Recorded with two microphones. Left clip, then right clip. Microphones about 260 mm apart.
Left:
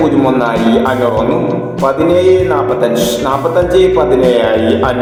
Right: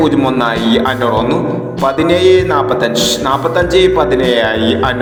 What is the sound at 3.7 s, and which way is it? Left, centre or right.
A man's voice, right.